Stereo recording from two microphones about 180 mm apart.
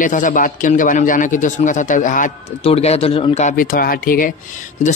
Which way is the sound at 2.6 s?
35° left (ahead or behind).